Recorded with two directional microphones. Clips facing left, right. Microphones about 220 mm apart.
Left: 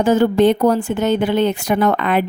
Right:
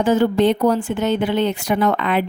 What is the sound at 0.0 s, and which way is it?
A woman's voice, 40° left (ahead or behind).